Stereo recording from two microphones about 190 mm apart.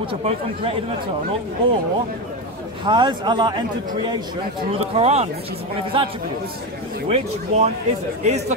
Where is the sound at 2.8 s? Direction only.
25° right (ahead or behind).